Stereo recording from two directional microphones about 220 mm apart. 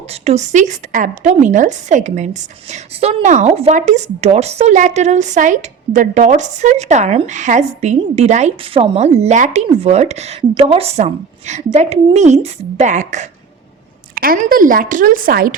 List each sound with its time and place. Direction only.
0.1 s a woman's voice: 30° right (ahead or behind)